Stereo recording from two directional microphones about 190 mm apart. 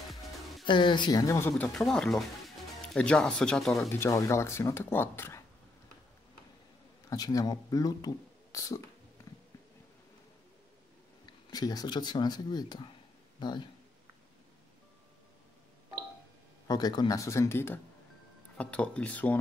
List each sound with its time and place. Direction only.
0.7 s speech: 25° left (ahead or behind)
1.5 s speech: 5° left (ahead or behind)
3.9 s speech: 15° left (ahead or behind)
7.1 s speech: 20° left (ahead or behind)
11.2 s speech: 20° left (ahead or behind)
16.6 s speech: 20° left (ahead or behind)